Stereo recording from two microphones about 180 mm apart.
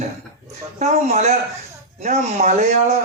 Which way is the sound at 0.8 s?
40° right (ahead or behind).